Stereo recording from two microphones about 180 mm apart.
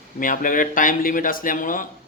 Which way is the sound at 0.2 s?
50° left (ahead or behind).